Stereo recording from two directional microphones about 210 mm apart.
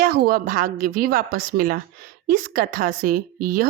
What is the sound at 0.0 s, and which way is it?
A woman's voice, 45° right (ahead or behind).